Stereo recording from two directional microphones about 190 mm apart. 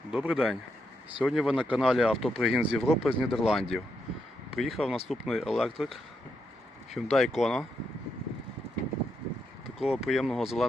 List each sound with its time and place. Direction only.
0.1 s speech: 5° right (ahead or behind)
9.7 s speech: centre (ahead or behind)